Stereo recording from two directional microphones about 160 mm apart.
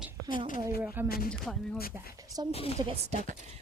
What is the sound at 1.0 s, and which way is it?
Speech, 70° left (ahead or behind).